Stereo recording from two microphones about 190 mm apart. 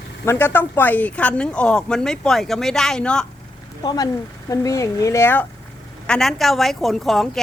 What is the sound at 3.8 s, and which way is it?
Speech, 20° left (ahead or behind).